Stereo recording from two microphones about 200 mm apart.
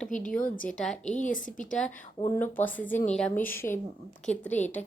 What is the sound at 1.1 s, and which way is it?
Speech, 40° left (ahead or behind).